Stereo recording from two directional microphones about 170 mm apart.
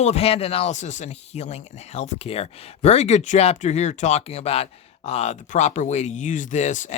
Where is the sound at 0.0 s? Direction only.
40° left (ahead or behind).